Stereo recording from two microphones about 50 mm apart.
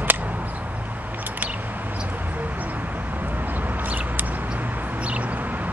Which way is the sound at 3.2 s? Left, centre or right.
Right.